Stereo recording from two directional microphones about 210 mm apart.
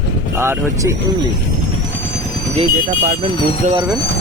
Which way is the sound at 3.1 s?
25° right (ahead or behind).